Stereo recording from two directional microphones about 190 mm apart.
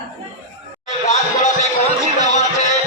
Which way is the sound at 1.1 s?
40° left (ahead or behind).